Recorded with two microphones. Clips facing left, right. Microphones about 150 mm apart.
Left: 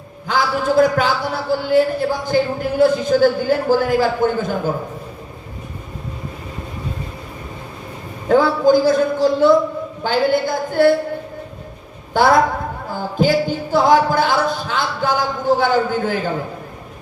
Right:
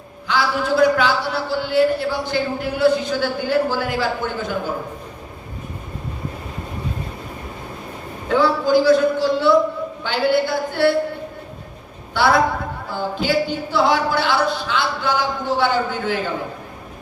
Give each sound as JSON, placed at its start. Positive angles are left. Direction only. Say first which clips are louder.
{"t": 0.3, "sound": "a man's voice", "louder": "left 2 dB", "side_deg": 45}
{"t": 8.3, "sound": "a man's voice", "louder": "left 3 dB", "side_deg": 45}
{"t": 12.1, "sound": "a man's voice", "louder": "left 3 dB", "side_deg": 45}